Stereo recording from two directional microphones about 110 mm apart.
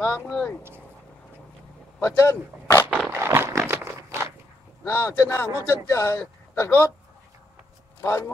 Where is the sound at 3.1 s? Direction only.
20° right (ahead or behind).